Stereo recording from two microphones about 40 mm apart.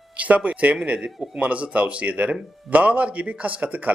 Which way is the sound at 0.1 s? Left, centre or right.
Right.